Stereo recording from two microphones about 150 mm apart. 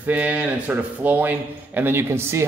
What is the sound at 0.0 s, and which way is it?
A man's voice, 10° right (ahead or behind).